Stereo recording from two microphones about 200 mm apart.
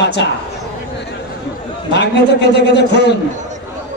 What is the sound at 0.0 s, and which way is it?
Speech, 60° left (ahead or behind).